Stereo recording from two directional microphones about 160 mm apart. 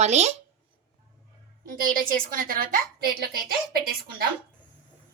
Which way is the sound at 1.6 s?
60° right (ahead or behind).